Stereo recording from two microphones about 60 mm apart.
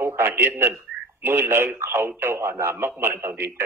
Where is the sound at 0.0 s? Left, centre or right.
Right.